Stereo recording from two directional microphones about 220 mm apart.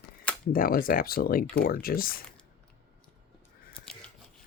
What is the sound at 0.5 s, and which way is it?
Speech, 40° left (ahead or behind).